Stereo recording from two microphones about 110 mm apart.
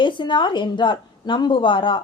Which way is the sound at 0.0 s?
45° left (ahead or behind).